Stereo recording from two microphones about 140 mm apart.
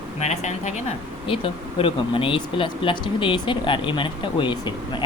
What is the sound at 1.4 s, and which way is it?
Speech, 40° left (ahead or behind).